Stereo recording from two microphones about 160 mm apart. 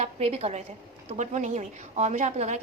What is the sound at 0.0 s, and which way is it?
A woman's voice, 40° right (ahead or behind).